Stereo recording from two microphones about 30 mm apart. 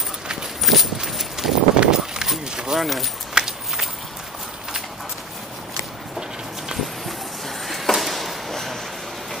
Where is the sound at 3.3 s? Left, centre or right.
Right.